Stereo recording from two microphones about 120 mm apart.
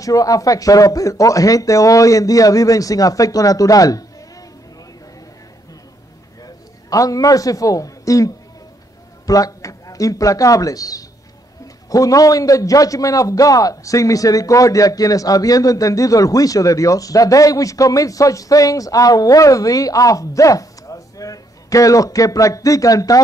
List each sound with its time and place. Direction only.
0.0 s a man's voice: 30° left (ahead or behind)
6.4 s a man's voice: 30° left (ahead or behind)